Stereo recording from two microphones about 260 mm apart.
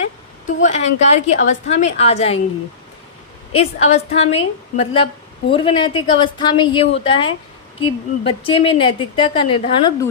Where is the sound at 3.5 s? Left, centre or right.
Left.